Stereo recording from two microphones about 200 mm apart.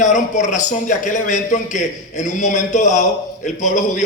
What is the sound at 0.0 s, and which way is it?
A man's voice, 40° left (ahead or behind).